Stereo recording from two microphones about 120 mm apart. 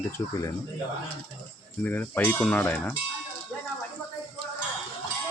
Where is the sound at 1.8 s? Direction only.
15° left (ahead or behind).